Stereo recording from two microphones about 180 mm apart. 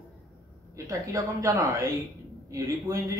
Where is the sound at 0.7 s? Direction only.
20° right (ahead or behind).